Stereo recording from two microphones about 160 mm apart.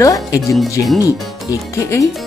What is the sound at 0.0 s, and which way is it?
Speech, 20° left (ahead or behind).